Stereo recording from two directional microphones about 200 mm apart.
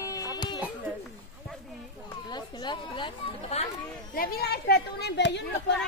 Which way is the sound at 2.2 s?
20° left (ahead or behind).